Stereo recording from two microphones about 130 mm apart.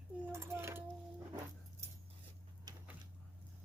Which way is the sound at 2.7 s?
30° right (ahead or behind).